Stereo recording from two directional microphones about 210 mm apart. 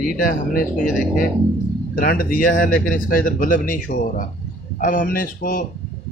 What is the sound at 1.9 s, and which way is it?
Speech, 40° left (ahead or behind).